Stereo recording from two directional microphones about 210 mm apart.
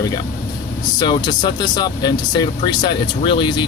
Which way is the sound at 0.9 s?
20° left (ahead or behind).